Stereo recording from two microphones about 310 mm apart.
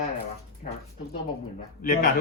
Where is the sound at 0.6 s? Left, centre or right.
Left.